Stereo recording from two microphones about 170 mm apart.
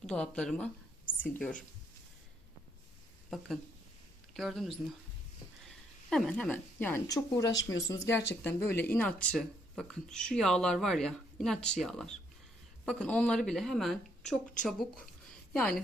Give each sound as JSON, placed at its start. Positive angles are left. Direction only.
{"t": 0.0, "sound": "speech", "side_deg": 5}
{"t": 3.2, "sound": "a woman's voice", "side_deg": 0}
{"t": 6.1, "sound": "speech", "side_deg": 5}
{"t": 7.1, "sound": "speech", "side_deg": 20}